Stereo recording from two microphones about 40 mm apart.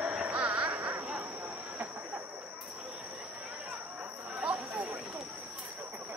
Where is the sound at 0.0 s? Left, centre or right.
Right.